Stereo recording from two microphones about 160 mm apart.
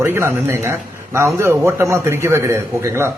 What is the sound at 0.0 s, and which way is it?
A man's voice, 15° right (ahead or behind).